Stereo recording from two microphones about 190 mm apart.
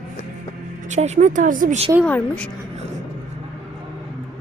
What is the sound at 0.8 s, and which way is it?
Speech, 40° right (ahead or behind).